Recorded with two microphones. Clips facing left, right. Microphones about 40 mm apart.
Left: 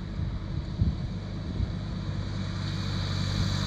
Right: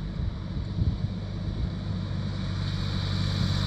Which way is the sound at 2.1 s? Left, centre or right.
Centre.